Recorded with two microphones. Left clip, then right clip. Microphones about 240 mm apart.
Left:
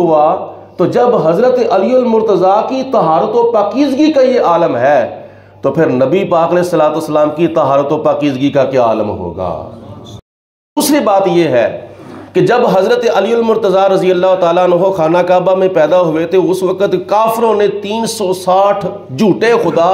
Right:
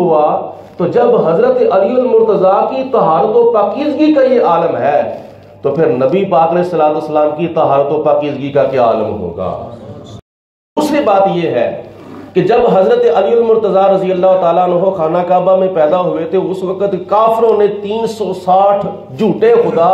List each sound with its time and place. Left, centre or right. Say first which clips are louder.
0.7 s a man's voice: even; left
10.8 s a man's voice: even; left